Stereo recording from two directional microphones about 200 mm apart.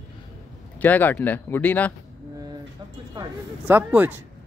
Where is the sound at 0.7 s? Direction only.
10° left (ahead or behind).